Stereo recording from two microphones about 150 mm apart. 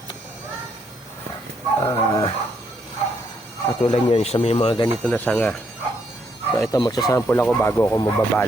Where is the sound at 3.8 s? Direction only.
45° left (ahead or behind).